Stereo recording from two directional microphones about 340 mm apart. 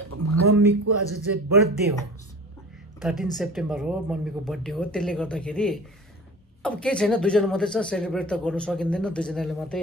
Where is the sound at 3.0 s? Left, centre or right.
Centre.